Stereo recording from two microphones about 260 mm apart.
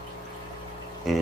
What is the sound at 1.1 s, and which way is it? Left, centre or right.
Speech, centre.